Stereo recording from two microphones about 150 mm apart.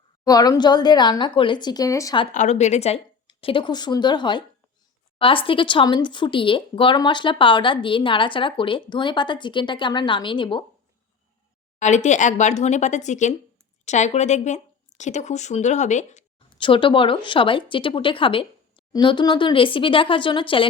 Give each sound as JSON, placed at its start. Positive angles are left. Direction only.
{"t": 0.3, "sound": "speech", "side_deg": 25}
{"t": 2.3, "sound": "speech", "side_deg": 50}
{"t": 11.8, "sound": "speech", "side_deg": 50}
{"t": 16.6, "sound": "speech", "side_deg": 35}